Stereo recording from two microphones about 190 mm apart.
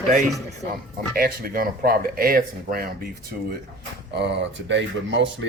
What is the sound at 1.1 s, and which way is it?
Speech, 50° right (ahead or behind).